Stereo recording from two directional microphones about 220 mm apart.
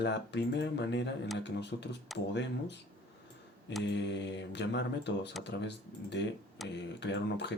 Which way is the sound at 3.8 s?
55° left (ahead or behind).